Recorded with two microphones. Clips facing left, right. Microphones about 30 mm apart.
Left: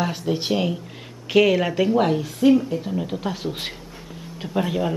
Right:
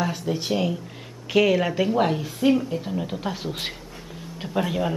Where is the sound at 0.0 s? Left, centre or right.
Left.